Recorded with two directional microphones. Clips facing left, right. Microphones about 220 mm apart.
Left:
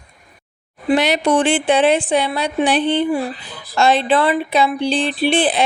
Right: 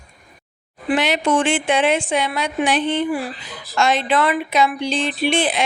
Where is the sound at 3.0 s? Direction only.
25° left (ahead or behind).